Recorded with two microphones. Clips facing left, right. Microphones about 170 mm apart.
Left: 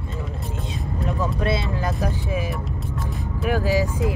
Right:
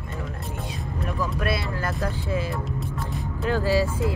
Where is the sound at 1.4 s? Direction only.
20° left (ahead or behind).